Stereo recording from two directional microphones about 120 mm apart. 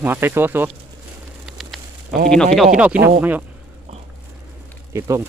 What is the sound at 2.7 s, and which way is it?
Speech, 10° right (ahead or behind).